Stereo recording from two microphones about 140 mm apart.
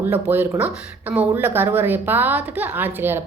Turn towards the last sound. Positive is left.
turn(degrees=-15)  # may be behind; listen again after turning